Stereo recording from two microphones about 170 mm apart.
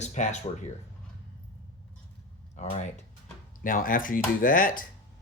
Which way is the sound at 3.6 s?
55° left (ahead or behind).